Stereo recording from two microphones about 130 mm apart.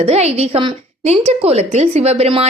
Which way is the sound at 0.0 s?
50° right (ahead or behind).